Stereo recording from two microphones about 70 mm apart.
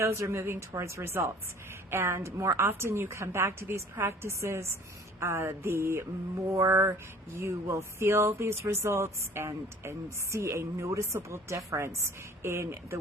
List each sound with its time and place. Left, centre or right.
0.0 s speech: right